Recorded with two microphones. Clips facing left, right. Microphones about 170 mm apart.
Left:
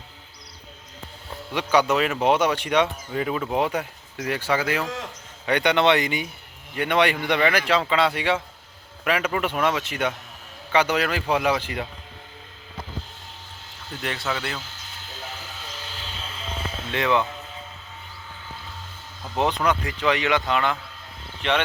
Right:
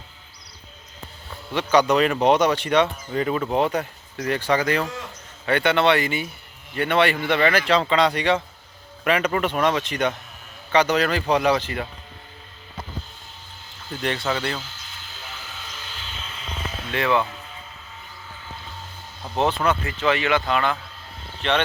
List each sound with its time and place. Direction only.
1.5 s speech: 10° left (ahead or behind)
13.9 s speech: centre (ahead or behind)
16.2 s a sound: 30° left (ahead or behind)
19.4 s speech: 15° left (ahead or behind)